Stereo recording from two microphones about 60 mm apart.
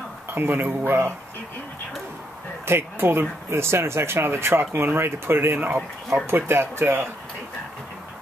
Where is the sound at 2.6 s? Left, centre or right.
Right.